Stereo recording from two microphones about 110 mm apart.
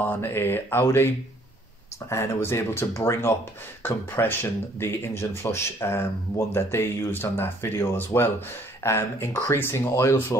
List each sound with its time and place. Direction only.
0.0 s speech: 20° left (ahead or behind)